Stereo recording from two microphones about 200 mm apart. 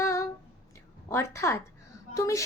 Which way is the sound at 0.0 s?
15° left (ahead or behind).